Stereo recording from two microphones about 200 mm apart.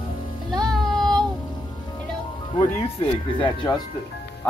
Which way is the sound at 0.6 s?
5° left (ahead or behind).